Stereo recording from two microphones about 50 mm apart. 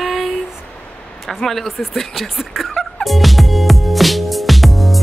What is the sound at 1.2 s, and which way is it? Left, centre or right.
Speech, centre.